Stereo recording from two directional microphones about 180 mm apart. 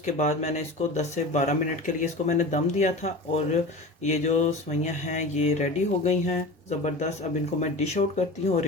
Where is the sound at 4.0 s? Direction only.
40° left (ahead or behind).